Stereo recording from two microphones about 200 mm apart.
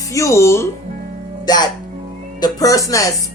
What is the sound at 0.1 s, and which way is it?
Speech, 15° left (ahead or behind).